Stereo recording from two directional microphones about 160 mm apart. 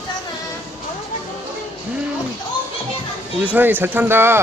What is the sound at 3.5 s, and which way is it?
Speech, 10° right (ahead or behind).